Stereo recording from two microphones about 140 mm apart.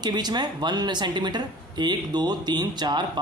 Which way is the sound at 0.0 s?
30° right (ahead or behind).